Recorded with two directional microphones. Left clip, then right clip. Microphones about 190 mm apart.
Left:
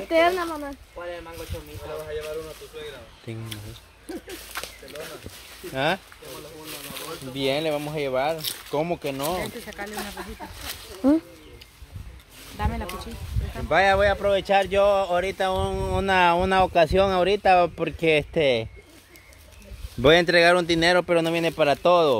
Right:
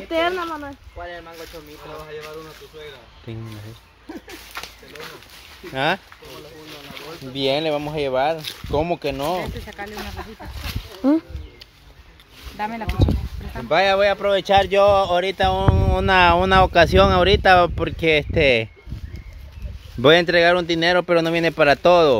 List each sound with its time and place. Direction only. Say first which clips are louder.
0.1 s speech: left 1 dB; 10° left (ahead or behind)
3.3 s speech: right 2 dB; 10° right (ahead or behind)
4.6 s a sound: right 1 dB; centre (ahead or behind)
5.7 s speech: right 3 dB; 30° right (ahead or behind)
7.3 s speech: right 4 dB; 40° right (ahead or behind)
9.6 s speech: right 1 dB; centre (ahead or behind)
12.5 s speech: right 6 dB; 25° right (ahead or behind)
20.0 s speech: right 3 dB; 5° right (ahead or behind); by 22.1 s 25° right (ahead or behind)